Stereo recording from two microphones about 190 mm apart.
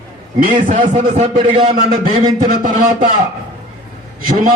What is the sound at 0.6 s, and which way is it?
A man's voice, 40° right (ahead or behind).